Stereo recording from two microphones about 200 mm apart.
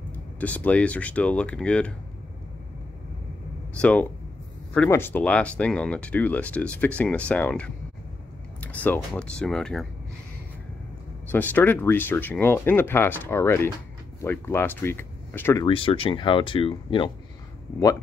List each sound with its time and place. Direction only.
0.1 s speech: 10° left (ahead or behind)
3.7 s speech: 5° left (ahead or behind)
11.2 s speech: 10° left (ahead or behind)
15.6 s speech: 25° left (ahead or behind)